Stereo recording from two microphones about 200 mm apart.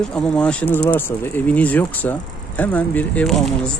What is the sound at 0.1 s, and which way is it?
Speech, 5° left (ahead or behind).